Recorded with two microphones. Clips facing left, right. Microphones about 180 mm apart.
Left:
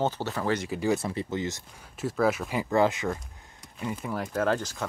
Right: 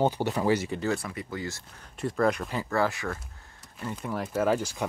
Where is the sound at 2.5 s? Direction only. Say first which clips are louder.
Left 3 dB; 20° left (ahead or behind).